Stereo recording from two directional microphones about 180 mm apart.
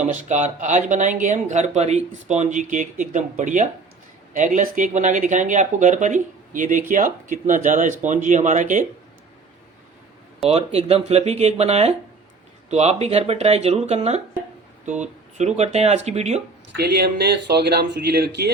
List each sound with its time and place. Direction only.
0.1 s speech: 40° right (ahead or behind)
10.5 s speech: 35° right (ahead or behind)
16.7 s speech: 65° right (ahead or behind)